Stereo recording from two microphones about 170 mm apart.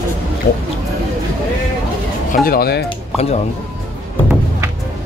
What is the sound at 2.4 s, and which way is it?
Speech, 65° left (ahead or behind).